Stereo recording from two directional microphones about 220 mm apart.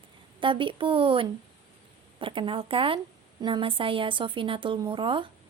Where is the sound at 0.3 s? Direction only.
20° right (ahead or behind).